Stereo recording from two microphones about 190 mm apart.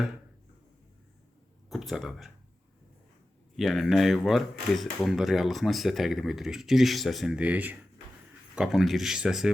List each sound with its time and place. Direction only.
1.7 s speech: centre (ahead or behind)
3.6 s speech: centre (ahead or behind)